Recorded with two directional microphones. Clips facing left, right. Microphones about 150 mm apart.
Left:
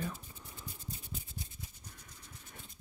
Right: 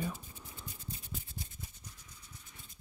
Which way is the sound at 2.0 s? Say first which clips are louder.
Left 2 dB; 55° left (ahead or behind).